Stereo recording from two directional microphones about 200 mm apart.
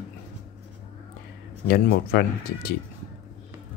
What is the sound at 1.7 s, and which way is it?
Speech, 50° left (ahead or behind).